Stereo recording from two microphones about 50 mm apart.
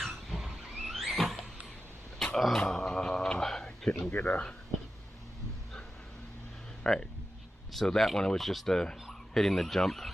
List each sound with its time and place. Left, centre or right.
0.3 s vehicle: centre
1.1 s a sound: centre
4.1 s speech: left
6.8 s speech: centre
9.0 s fowl: centre